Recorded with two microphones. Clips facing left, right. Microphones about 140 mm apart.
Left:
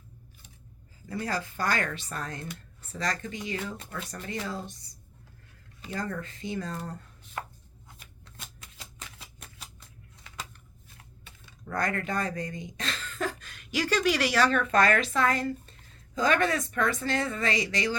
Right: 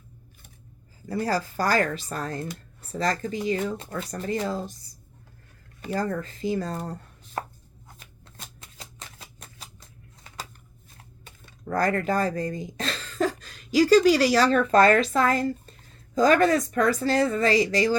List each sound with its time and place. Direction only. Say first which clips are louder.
1.0 s speech: right 6 dB; 35° right (ahead or behind)
6.0 s speech: right 6 dB; 35° right (ahead or behind)
8.4 s shuffling cards: right 3 dB; 35° right (ahead or behind)
11.3 s speech: right 6 dB; 40° right (ahead or behind)